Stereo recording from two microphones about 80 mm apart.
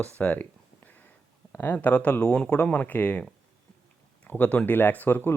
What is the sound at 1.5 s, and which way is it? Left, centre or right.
Speech, left.